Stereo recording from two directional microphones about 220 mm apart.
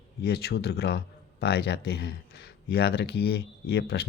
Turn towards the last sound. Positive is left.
turn(degrees=45)  # may be behind; listen again after turning